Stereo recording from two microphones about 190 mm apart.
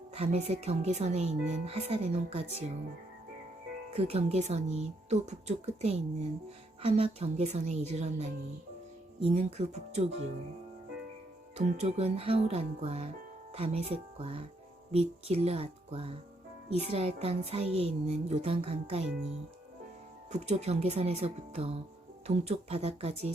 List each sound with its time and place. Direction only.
0.1 s speech: 35° right (ahead or behind)
3.9 s speech: 35° right (ahead or behind)
11.5 s speech: 35° right (ahead or behind)
20.3 s speech: 35° right (ahead or behind)